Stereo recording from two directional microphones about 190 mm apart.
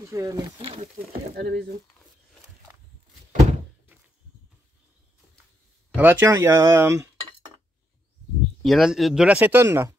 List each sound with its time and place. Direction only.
0.0 s speech: 15° right (ahead or behind)
1.3 s speech: 55° right (ahead or behind)
5.9 s speech: 10° right (ahead or behind)
8.6 s speech: centre (ahead or behind)